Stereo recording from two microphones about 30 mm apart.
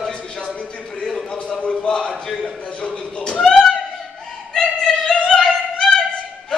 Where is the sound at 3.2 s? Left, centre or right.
Left.